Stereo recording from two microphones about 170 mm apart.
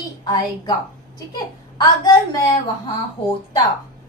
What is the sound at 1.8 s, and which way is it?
Speech, 20° left (ahead or behind).